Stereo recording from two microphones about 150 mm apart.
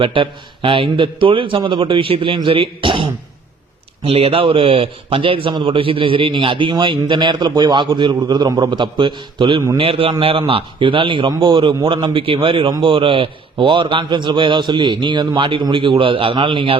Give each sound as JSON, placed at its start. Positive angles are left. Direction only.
{"t": 0.0, "sound": "a man's voice", "side_deg": -35}